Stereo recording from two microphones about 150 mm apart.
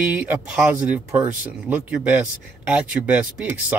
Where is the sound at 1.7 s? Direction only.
10° right (ahead or behind).